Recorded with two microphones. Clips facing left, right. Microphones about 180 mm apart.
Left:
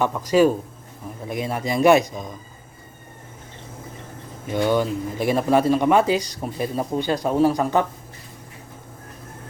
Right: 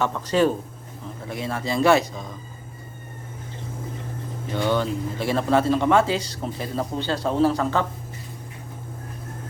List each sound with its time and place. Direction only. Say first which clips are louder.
0.0 s speech: left 3 dB; 10° left (ahead or behind)
4.5 s speech: left 3 dB; 10° left (ahead or behind)